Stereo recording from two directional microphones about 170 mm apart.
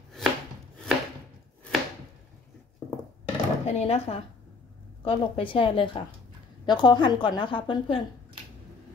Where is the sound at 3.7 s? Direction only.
35° left (ahead or behind).